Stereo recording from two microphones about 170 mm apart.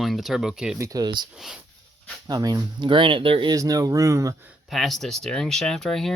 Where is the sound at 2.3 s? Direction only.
25° right (ahead or behind).